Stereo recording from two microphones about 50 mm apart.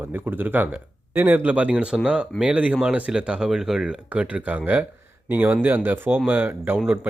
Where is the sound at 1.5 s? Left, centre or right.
Right.